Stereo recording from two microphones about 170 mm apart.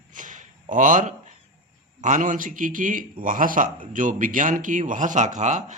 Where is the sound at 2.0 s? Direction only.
50° right (ahead or behind).